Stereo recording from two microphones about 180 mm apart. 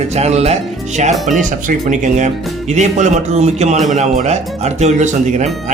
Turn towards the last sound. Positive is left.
turn(degrees=-40)  # may be behind; listen again after turning